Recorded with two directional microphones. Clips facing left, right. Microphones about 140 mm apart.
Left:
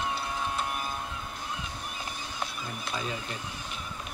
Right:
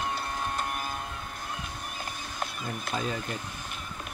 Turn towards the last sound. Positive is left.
turn(degrees=-50)  # may be behind; listen again after turning